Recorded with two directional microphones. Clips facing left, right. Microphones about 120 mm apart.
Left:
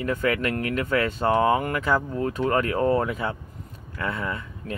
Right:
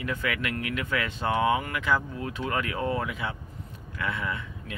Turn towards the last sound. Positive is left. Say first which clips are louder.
# left 3 dB
turn(degrees=40)  # may be behind; listen again after turning